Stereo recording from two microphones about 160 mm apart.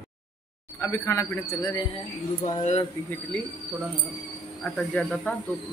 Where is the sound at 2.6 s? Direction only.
45° left (ahead or behind).